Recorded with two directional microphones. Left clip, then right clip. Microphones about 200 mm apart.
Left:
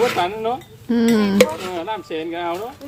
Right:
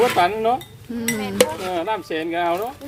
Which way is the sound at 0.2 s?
25° right (ahead or behind).